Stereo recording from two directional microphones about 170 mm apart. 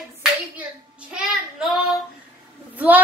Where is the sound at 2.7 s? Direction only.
10° right (ahead or behind).